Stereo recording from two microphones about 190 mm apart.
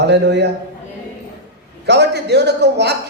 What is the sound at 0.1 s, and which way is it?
Speech, 65° right (ahead or behind).